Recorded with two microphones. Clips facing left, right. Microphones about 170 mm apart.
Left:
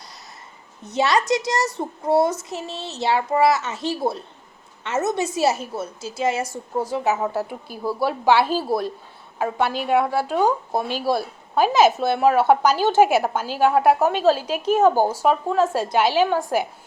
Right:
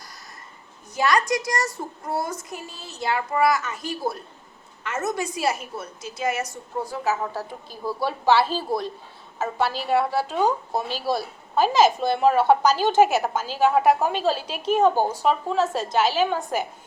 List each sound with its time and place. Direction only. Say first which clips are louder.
0.9 s a woman's voice: left 2 dB; 25° left (ahead or behind)